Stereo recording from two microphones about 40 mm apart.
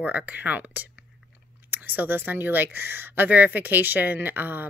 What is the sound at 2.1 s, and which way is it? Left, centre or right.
Speech, right.